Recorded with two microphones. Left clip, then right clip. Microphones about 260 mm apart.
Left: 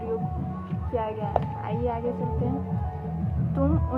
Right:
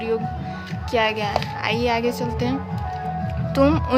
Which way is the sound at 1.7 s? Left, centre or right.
Right.